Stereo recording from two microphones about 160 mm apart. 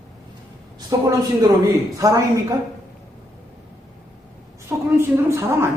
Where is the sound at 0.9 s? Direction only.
25° right (ahead or behind).